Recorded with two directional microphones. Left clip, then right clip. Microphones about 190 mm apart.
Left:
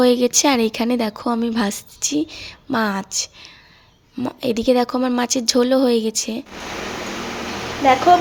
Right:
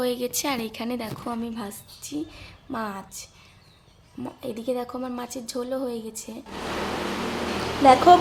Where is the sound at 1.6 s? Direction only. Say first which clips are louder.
Left 14 dB; 45° left (ahead or behind).